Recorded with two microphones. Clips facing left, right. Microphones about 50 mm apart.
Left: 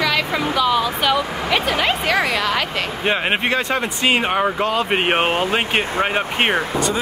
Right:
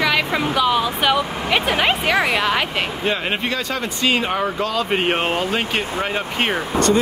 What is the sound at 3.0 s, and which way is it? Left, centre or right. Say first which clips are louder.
Speech: left 5 dB; left.